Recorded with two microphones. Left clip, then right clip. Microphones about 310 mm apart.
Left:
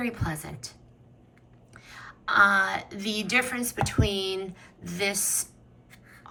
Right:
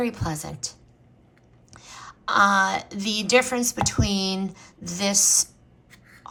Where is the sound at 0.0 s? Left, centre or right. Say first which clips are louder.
Right 5 dB; centre.